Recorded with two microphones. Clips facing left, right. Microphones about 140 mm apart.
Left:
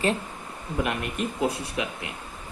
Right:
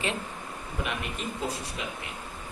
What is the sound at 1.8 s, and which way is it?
Speech, 65° left (ahead or behind).